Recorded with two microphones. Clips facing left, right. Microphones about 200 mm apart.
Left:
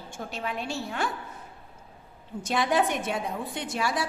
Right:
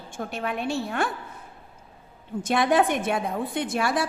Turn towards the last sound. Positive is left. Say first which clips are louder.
# right 4 dB
turn(degrees=-55)  # may be behind; listen again after turning